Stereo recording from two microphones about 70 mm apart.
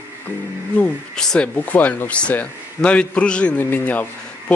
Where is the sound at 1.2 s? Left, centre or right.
Centre.